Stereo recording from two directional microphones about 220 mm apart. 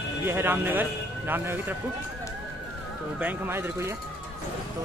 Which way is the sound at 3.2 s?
10° right (ahead or behind).